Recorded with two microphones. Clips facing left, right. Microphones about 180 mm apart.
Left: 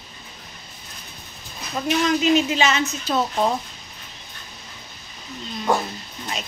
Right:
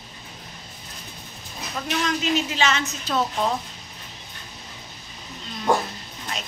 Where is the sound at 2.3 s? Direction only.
15° left (ahead or behind).